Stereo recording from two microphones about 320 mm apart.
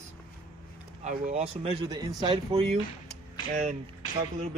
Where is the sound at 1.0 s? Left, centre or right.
Right.